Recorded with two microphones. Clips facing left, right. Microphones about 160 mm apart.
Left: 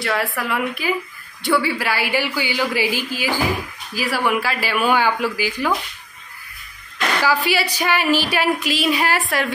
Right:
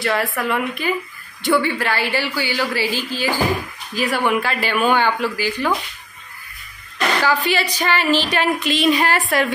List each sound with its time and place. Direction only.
0.0 s a woman's voice: centre (ahead or behind)
7.2 s a woman's voice: 10° left (ahead or behind)